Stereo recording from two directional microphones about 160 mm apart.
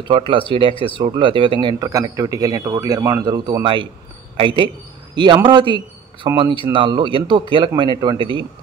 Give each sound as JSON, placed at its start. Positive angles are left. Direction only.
{"t": 0.1, "sound": "a man's voice", "side_deg": -30}